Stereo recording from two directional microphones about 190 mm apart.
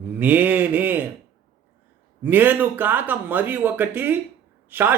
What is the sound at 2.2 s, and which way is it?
Speech, 10° right (ahead or behind).